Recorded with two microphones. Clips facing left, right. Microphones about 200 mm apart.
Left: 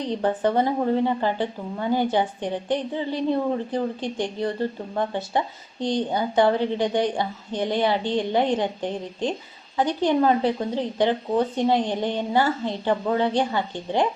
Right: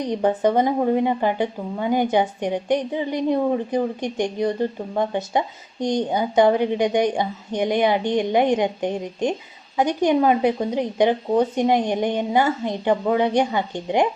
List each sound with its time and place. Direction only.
0.0 s speech: 15° right (ahead or behind)